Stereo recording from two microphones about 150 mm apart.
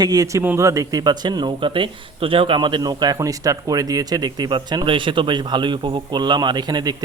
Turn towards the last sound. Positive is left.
turn(degrees=-30)  # may be behind; listen again after turning